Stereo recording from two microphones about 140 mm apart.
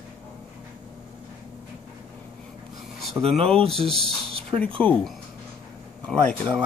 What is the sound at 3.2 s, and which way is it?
Speech, 45° right (ahead or behind).